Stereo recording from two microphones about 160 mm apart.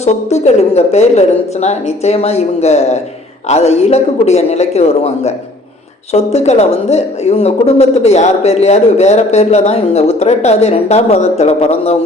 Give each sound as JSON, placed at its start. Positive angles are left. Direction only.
{"t": 0.0, "sound": "speech", "side_deg": 45}